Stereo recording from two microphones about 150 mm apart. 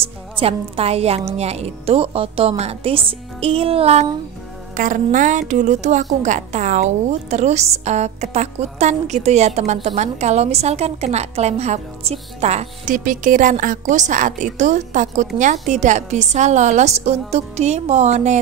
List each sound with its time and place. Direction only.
0.4 s a woman's voice: 40° right (ahead or behind)
4.7 s a woman's voice: 60° right (ahead or behind)